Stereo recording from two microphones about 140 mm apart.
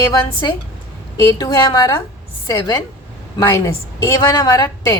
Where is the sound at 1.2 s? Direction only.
25° left (ahead or behind).